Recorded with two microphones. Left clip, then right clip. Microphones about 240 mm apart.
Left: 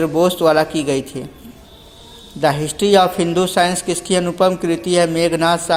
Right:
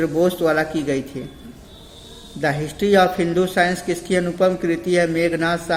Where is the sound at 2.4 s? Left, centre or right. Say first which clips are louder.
Left 5 dB; centre.